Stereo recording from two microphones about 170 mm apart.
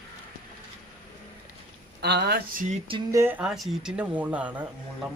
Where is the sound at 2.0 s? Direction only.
75° right (ahead or behind).